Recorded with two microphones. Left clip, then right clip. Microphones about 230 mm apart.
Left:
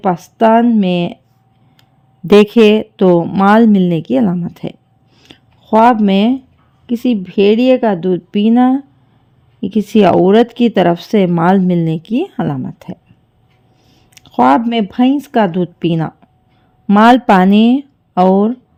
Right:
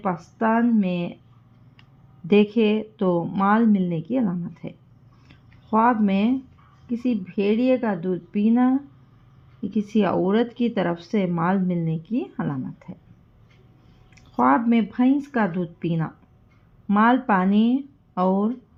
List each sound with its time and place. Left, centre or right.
0.0 s speech: left
2.2 s speech: left
5.2 s a sound: left
6.8 s speech: left
14.1 s speech: left